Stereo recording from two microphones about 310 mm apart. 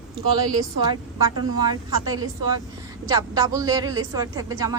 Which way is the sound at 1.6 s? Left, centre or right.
Centre.